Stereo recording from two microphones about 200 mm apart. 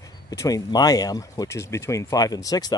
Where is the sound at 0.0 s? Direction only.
15° left (ahead or behind).